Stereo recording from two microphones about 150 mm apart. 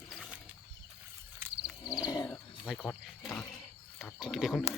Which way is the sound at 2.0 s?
25° left (ahead or behind).